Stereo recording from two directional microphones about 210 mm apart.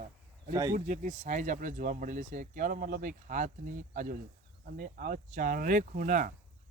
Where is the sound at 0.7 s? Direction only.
35° right (ahead or behind).